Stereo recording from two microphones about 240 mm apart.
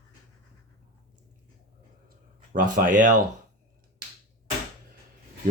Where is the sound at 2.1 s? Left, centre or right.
Right.